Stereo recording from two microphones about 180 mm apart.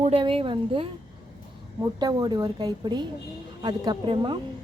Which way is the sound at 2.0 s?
20° right (ahead or behind).